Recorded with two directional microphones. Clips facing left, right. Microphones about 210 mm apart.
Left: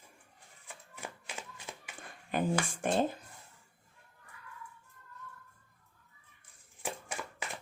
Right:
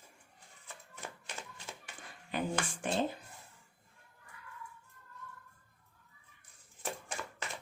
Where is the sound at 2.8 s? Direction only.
50° left (ahead or behind).